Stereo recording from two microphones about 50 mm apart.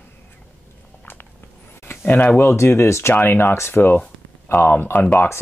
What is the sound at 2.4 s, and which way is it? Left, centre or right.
Speech, left.